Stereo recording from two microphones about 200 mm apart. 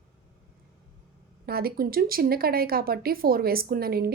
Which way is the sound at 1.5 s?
50° right (ahead or behind).